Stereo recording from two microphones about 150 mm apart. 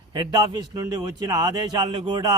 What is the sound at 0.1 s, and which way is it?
Speech, 30° right (ahead or behind).